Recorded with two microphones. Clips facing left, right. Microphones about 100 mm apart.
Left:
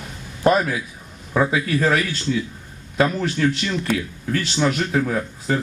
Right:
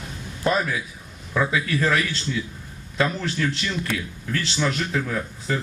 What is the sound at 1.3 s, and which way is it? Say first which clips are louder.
Speech: left 3 dB; 30° left (ahead or behind).